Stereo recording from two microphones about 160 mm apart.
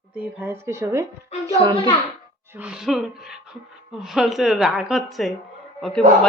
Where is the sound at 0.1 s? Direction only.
10° right (ahead or behind).